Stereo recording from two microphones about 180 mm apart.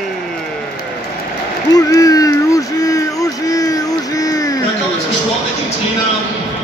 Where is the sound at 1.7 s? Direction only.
20° left (ahead or behind).